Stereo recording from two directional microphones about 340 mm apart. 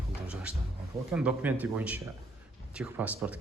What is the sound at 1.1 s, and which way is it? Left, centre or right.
Speech, centre.